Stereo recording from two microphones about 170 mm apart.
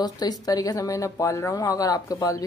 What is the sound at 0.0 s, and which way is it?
Speech, 20° left (ahead or behind).